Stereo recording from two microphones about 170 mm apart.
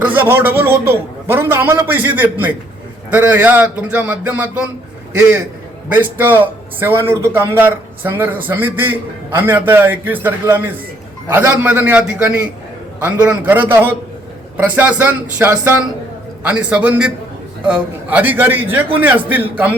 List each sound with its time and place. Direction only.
0.0 s a man's voice: 10° right (ahead or behind)
5.9 s a man's voice: 10° right (ahead or behind)